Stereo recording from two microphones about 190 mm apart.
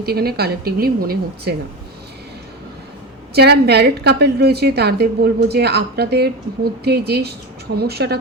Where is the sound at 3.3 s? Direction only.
60° right (ahead or behind).